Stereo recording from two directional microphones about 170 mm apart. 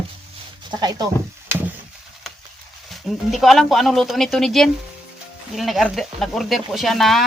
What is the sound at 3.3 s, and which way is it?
Speech, centre (ahead or behind).